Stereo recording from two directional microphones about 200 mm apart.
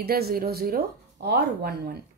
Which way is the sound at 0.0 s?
50° right (ahead or behind).